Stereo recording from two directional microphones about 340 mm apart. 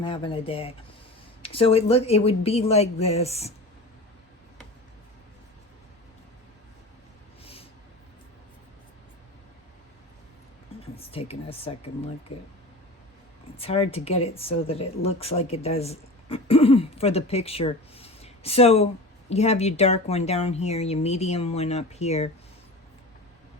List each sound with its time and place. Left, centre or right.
0.0 s speech: centre
7.4 s a sound: centre
10.9 s speech: centre
13.6 s speech: centre